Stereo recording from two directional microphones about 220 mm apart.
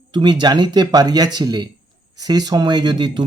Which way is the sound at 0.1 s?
20° right (ahead or behind).